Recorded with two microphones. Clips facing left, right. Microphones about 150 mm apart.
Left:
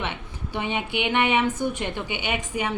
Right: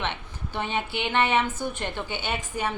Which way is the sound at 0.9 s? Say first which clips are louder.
Left 2 dB; 15° left (ahead or behind).